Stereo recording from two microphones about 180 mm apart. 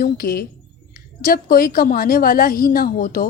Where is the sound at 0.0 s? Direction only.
55° left (ahead or behind).